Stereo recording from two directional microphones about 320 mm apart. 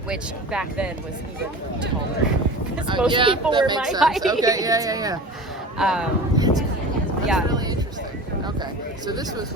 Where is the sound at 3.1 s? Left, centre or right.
Centre.